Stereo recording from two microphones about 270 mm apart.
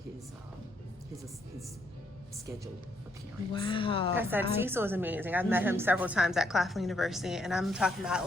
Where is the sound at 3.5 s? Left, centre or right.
Centre.